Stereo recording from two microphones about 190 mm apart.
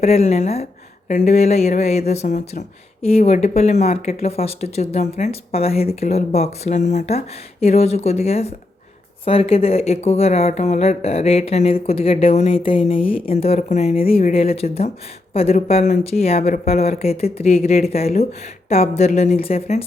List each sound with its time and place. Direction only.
0.0 s speech: 35° left (ahead or behind)